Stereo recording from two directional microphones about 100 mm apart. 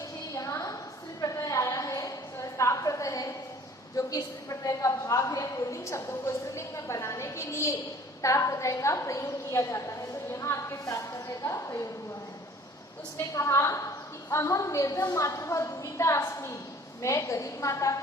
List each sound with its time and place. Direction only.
0.3 s a sound: 35° left (ahead or behind)
3.9 s a woman's voice: 35° left (ahead or behind)
13.3 s a woman's voice: 30° left (ahead or behind)